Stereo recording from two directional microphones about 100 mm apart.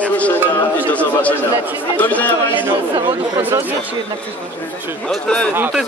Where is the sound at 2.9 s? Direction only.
50° right (ahead or behind).